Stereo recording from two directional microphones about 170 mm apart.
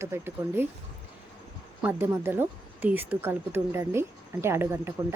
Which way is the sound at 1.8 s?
10° right (ahead or behind).